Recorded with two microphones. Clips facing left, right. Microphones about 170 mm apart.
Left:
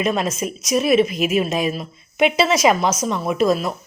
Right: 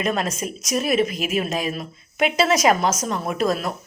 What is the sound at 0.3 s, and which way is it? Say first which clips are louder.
Speech: left 4 dB; 35° right (ahead or behind).